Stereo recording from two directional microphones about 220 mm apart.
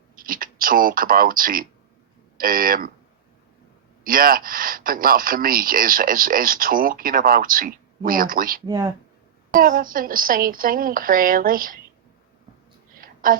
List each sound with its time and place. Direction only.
0.2 s speech: 40° right (ahead or behind)
4.0 s speech: 40° right (ahead or behind)
8.6 s speech: 15° right (ahead or behind)
9.5 s speech: 40° right (ahead or behind)
13.0 s a sound: 40° right (ahead or behind)